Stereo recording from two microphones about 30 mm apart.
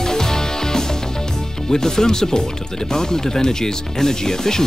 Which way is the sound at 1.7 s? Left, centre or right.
Centre.